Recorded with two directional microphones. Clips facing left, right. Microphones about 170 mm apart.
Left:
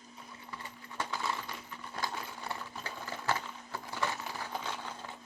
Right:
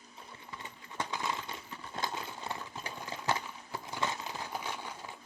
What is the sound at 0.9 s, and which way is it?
Coin, 20° right (ahead or behind).